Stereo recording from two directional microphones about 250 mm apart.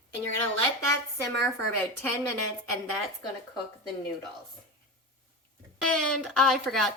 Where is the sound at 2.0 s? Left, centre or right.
Centre.